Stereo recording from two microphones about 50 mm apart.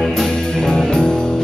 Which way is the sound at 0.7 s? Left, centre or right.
Centre.